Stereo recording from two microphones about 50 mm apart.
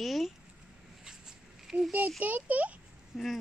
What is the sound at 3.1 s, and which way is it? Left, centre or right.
Speech, centre.